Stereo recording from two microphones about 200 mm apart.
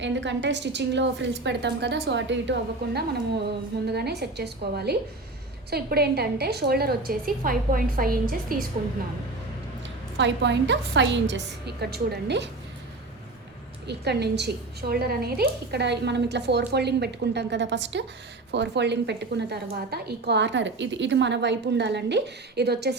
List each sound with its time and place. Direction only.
0.0 s a woman's voice: 65° right (ahead or behind); by 8.6 s 45° right (ahead or behind)
10.2 s a woman's voice: 60° right (ahead or behind)
13.8 s a woman's voice: 55° right (ahead or behind)